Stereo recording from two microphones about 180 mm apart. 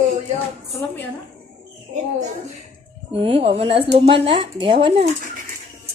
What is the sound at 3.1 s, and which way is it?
Speech, 30° right (ahead or behind).